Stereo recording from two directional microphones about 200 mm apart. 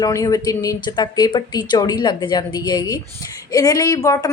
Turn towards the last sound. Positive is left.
turn(degrees=15)  # may be behind; listen again after turning